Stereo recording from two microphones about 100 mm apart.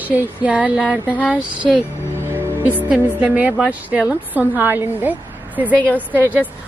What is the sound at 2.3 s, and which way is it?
Speech, 20° right (ahead or behind).